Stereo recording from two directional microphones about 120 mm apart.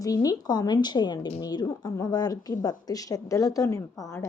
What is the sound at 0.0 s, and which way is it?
Speech, 30° left (ahead or behind).